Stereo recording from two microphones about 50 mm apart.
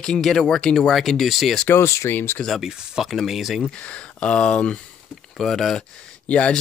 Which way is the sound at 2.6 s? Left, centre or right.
Centre.